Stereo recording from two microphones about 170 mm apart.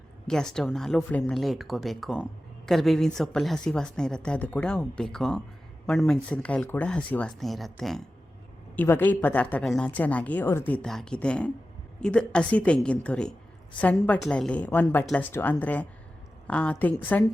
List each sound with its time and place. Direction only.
0.3 s a woman's voice: 5° left (ahead or behind)